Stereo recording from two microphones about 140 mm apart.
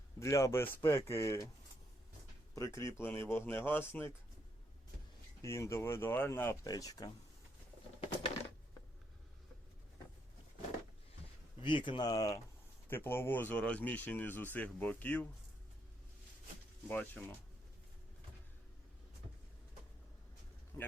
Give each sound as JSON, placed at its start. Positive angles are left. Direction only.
{"t": 0.2, "sound": "speech", "side_deg": 20}
{"t": 2.6, "sound": "speech", "side_deg": 20}
{"t": 5.4, "sound": "speech", "side_deg": 20}
{"t": 11.6, "sound": "speech", "side_deg": 35}
{"t": 16.9, "sound": "speech", "side_deg": 10}
{"t": 20.7, "sound": "speech", "side_deg": 20}